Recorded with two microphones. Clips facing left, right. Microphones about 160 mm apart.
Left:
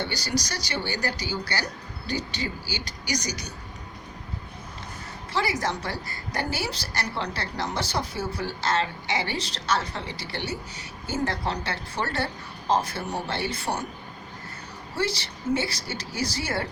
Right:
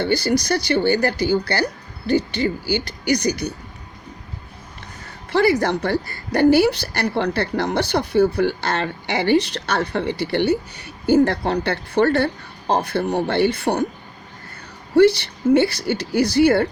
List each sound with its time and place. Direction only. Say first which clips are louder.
0.0 s a woman's voice: right 10 dB; 55° right (ahead or behind)
5.3 s a woman's voice: right 10 dB; 60° right (ahead or behind)
14.9 s a woman's voice: right 16 dB; 60° right (ahead or behind)